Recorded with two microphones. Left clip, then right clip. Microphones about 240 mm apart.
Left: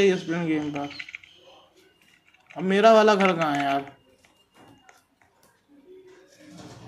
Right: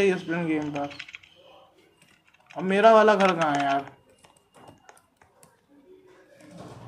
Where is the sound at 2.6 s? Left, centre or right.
Centre.